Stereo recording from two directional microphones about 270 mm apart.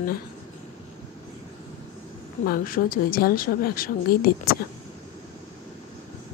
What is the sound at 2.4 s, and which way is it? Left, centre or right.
A woman's voice, left.